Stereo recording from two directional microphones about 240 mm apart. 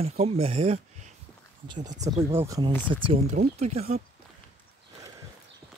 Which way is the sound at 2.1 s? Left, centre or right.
Centre.